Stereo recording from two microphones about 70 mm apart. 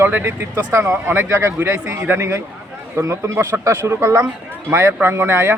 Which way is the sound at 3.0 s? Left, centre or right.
Right.